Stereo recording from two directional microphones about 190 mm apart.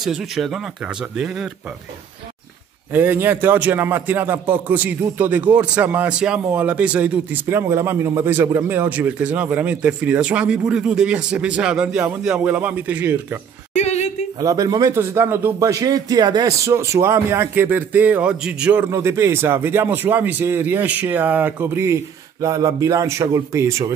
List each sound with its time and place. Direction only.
0.0 s speech: centre (ahead or behind)
2.9 s a man's voice: 10° right (ahead or behind)
13.7 s a sound: 35° left (ahead or behind)
14.4 s a man's voice: 20° right (ahead or behind)